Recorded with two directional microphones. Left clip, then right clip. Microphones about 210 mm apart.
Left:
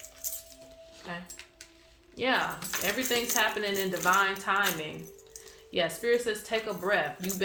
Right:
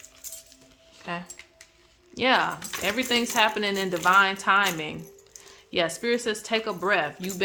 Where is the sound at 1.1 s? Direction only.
45° right (ahead or behind).